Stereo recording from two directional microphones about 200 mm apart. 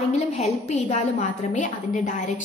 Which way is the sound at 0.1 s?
35° left (ahead or behind).